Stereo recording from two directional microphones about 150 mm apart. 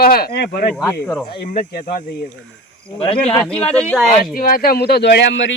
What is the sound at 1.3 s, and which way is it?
Speech, 80° left.